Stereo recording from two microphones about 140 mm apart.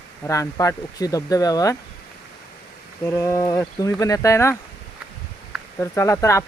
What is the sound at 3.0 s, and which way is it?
Speech, 20° left (ahead or behind).